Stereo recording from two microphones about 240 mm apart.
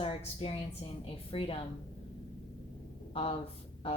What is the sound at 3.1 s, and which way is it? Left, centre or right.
Speech, left.